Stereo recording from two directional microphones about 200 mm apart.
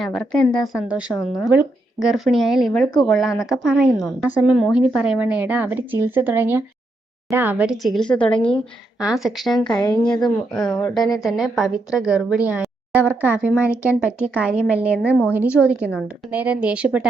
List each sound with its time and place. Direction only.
0.0 s a woman's voice: 5° left (ahead or behind)
9.8 s a woman's voice: 20° left (ahead or behind)
10.2 s speech: 5° left (ahead or behind)